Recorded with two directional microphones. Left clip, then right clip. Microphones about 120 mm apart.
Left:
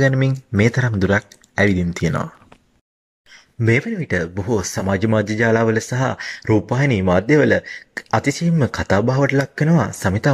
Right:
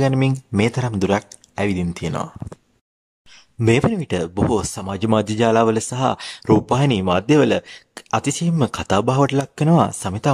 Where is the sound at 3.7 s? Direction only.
25° right (ahead or behind).